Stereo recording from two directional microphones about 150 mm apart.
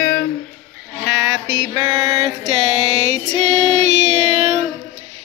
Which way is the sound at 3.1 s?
50° right (ahead or behind).